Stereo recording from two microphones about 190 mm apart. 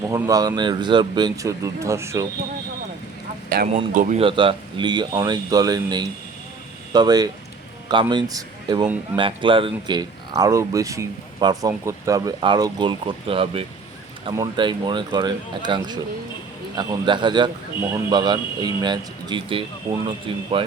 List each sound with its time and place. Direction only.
0.1 s speech: 20° right (ahead or behind)
3.5 s speech: 50° right (ahead or behind)
4.2 s speech: 25° right (ahead or behind)